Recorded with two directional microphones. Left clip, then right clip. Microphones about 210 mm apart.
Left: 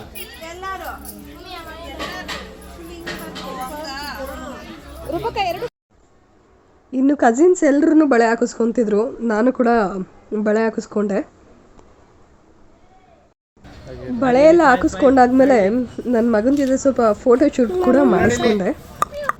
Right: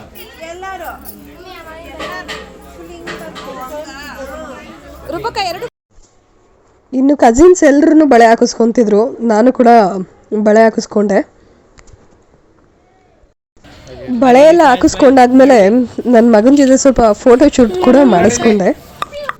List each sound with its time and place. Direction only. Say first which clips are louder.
0.4 s a sound: right 4 dB; 40° right (ahead or behind)
3.8 s a sound: left 1 dB; 5° right (ahead or behind)
5.3 s speech: right 3 dB; 40° right (ahead or behind)
6.9 s a woman's voice: right 7 dB; 15° right (ahead or behind)
14.2 s a woman's voice: right 6 dB; 25° right (ahead or behind)
17.9 s a woman's voice: right 6 dB; 20° right (ahead or behind)